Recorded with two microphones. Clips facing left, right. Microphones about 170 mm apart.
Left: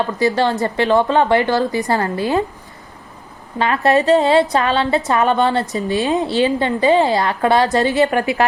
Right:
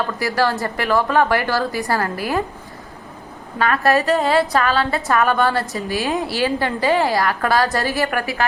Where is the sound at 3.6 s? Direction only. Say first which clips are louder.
Left 2 dB; 25° left (ahead or behind).